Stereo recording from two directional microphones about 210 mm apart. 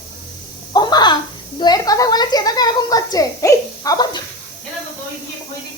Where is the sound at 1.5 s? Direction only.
20° left (ahead or behind).